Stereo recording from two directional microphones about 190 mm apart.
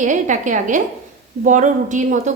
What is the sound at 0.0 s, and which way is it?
A woman's voice, 40° right (ahead or behind).